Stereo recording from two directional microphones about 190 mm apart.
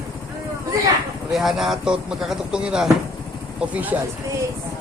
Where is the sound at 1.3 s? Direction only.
Centre (ahead or behind).